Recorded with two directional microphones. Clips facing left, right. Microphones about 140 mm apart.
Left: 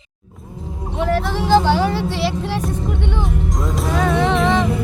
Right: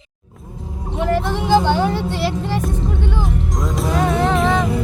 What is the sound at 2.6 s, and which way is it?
Speech, centre (ahead or behind).